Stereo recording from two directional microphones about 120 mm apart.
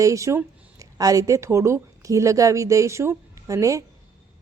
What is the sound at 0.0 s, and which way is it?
Speech, 25° right (ahead or behind).